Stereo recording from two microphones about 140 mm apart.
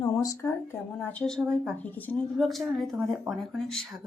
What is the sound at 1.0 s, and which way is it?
A woman's voice, 10° left (ahead or behind).